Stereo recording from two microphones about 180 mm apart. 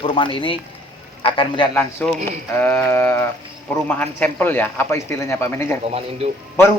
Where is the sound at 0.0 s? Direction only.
30° left (ahead or behind).